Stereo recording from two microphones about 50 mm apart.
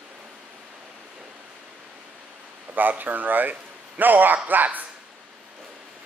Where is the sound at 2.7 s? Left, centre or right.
Right.